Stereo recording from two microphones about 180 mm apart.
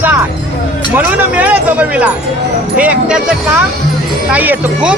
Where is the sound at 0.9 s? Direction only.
10° right (ahead or behind).